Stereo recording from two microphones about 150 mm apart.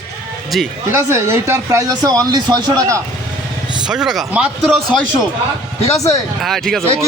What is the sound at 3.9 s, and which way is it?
Speech, 5° right (ahead or behind).